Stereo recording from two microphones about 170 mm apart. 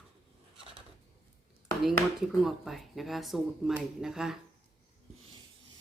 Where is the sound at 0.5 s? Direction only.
30° right (ahead or behind).